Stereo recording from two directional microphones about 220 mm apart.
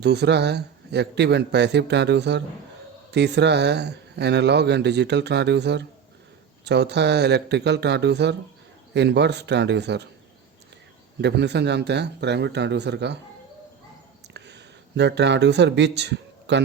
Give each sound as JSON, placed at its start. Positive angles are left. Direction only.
{"t": 0.0, "sound": "speech", "side_deg": -50}
{"t": 11.2, "sound": "speech", "side_deg": -50}
{"t": 14.3, "sound": "speech", "side_deg": -50}